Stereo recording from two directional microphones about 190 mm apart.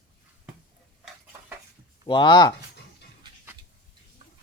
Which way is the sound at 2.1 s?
25° left (ahead or behind).